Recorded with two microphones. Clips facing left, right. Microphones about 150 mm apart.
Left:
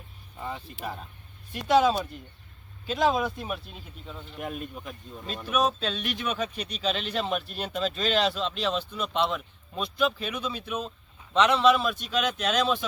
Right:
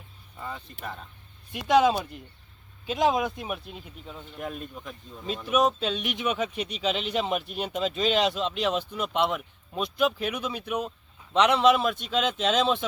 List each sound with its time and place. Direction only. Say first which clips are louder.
0.3 s speech: left 2 dB; 15° left (ahead or behind)
1.5 s speech: right 1 dB; 20° right (ahead or behind)
4.4 s speech: left 1 dB; 10° left (ahead or behind)
5.5 s speech: right 2 dB; 20° right (ahead or behind)